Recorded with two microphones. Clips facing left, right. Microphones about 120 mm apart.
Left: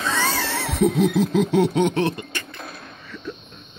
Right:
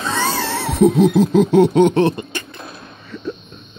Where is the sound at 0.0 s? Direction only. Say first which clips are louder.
Right 3 dB; 30° right (ahead or behind).